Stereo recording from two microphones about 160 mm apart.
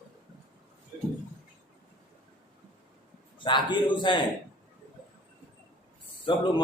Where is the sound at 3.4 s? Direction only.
30° left (ahead or behind).